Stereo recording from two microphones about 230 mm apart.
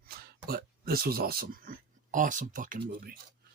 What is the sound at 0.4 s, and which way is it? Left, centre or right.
Speech, right.